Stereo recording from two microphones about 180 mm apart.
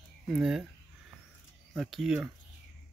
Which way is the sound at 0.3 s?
5° right (ahead or behind).